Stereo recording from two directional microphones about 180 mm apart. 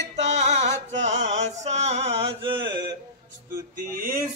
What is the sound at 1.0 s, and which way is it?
Mantra, 40° right (ahead or behind).